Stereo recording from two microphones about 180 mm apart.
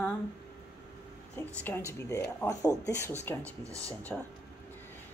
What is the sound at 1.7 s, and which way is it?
Speech, 15° left (ahead or behind).